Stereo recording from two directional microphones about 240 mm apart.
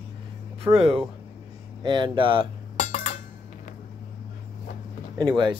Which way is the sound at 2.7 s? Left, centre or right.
Left.